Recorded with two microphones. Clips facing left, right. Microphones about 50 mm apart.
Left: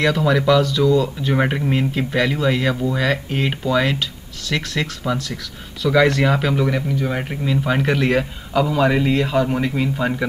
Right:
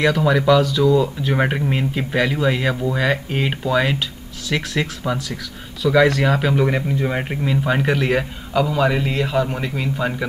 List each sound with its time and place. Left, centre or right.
0.0 s a man's voice: centre
6.7 s speech: right
7.2 s a man's voice: centre